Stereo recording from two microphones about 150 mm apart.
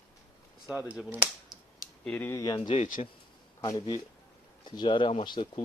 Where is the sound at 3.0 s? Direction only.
45° left (ahead or behind).